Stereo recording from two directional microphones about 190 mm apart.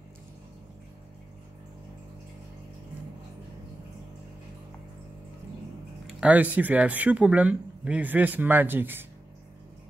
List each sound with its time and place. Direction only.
6.0 s speech: 5° right (ahead or behind)